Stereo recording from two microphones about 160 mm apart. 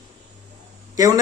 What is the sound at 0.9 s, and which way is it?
Speech, 20° right (ahead or behind).